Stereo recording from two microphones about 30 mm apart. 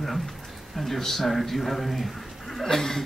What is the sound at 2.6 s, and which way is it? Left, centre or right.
Speech, centre.